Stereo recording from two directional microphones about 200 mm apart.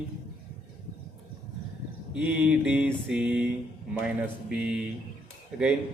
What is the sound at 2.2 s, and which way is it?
Mantra, 5° right (ahead or behind).